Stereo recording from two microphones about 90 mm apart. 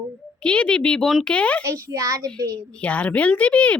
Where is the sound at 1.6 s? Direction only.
35° right (ahead or behind).